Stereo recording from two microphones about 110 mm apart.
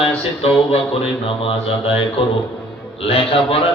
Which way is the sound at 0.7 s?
60° left (ahead or behind).